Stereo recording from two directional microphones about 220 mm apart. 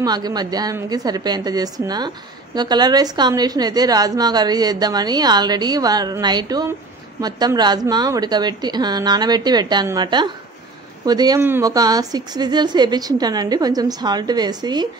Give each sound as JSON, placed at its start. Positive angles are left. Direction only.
{"t": 0.0, "sound": "a woman's voice", "side_deg": -20}